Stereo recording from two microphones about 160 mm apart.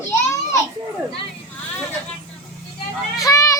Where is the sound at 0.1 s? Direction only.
20° left (ahead or behind).